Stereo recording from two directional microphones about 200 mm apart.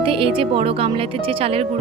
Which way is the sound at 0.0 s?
25° right (ahead or behind).